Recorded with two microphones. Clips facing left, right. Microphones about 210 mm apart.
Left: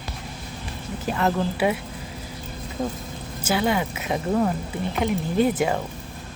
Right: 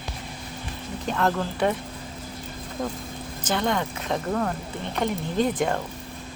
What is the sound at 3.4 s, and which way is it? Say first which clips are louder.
A woman's voice: left 2 dB; 5° left (ahead or behind).